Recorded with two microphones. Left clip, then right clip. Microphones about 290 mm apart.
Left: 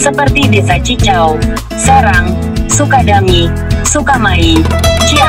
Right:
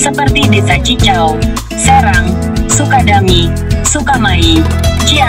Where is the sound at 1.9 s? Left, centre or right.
Right.